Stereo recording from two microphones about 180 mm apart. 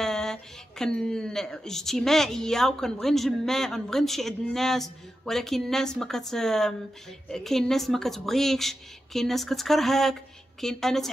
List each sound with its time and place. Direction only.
0.0 s speech: 5° left (ahead or behind)